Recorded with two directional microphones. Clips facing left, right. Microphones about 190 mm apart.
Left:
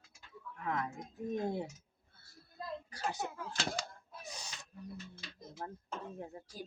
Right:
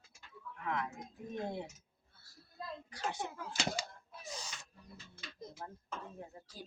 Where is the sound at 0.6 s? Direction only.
40° left (ahead or behind).